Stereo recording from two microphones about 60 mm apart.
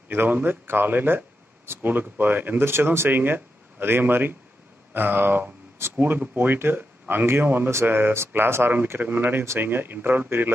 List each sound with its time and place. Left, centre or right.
0.1 s speech: right